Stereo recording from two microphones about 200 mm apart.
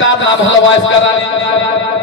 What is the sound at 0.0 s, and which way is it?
A man's voice, 75° left (ahead or behind).